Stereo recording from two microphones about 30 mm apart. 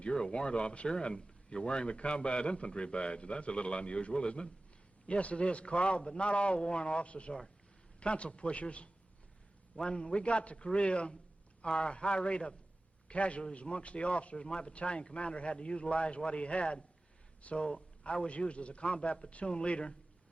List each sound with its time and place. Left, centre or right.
0.0 s speech: left
9.8 s a man's voice: left
14.3 s speech: left